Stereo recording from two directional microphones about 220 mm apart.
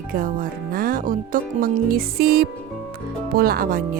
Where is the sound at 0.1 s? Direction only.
40° right (ahead or behind).